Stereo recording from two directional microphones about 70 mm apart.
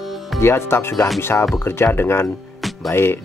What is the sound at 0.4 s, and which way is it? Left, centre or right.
Speech, left.